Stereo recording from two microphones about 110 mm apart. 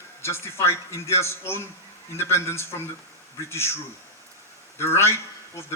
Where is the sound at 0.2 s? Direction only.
25° left (ahead or behind).